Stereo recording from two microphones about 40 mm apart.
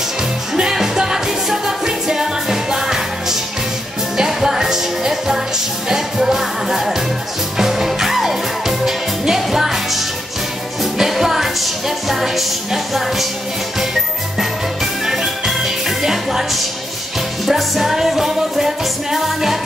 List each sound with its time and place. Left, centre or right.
0.6 s music: centre
14.4 s music: centre